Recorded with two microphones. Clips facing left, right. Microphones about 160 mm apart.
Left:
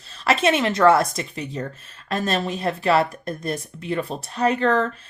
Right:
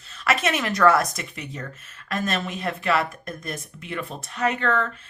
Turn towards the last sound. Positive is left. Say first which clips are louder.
# left 4 dB
turn(degrees=35)  # may be behind; listen again after turning